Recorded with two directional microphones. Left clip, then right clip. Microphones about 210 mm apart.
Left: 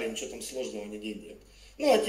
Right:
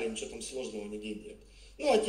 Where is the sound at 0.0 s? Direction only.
25° left (ahead or behind).